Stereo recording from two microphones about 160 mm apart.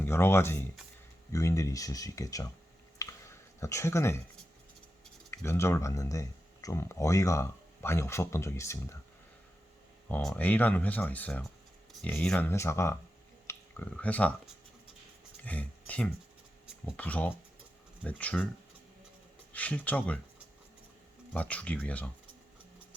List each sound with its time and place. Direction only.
0.0 s speech: 15° left (ahead or behind)
3.0 s a sound: 15° left (ahead or behind)
5.5 s speech: 15° left (ahead or behind)
10.1 s speech: 5° left (ahead or behind)
12.5 s speech: 15° left (ahead or behind)
15.4 s speech: 10° left (ahead or behind)
19.5 s speech: 10° left (ahead or behind)
21.3 s speech: 10° left (ahead or behind)